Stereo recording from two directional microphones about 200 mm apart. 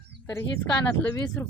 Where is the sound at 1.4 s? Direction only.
10° left (ahead or behind).